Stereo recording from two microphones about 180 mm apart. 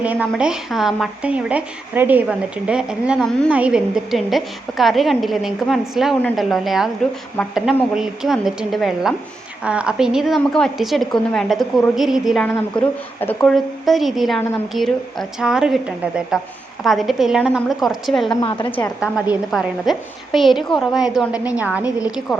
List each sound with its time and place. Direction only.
0.0 s a woman's voice: 5° right (ahead or behind)
12.5 s a woman's voice: 10° left (ahead or behind)
18.3 s a woman's voice: 25° left (ahead or behind)
18.9 s a woman's voice: 5° right (ahead or behind)